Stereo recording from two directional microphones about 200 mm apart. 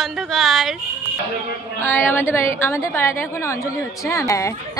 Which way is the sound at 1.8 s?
10° left (ahead or behind).